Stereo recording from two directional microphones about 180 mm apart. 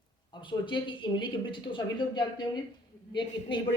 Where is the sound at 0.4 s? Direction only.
25° left (ahead or behind).